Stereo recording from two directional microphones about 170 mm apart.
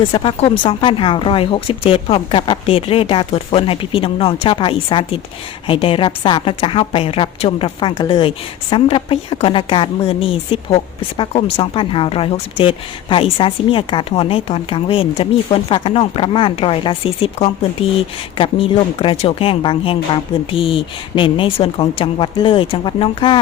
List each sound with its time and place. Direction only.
0.0 s speech: 30° left (ahead or behind)
18.3 s speech: 30° left (ahead or behind)